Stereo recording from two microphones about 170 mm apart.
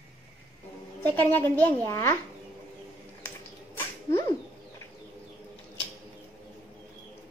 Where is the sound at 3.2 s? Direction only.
15° left (ahead or behind).